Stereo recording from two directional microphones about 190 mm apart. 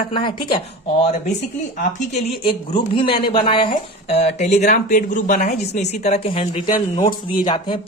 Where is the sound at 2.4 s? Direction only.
25° left (ahead or behind).